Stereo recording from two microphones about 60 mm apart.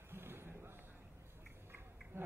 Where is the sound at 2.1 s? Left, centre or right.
Right.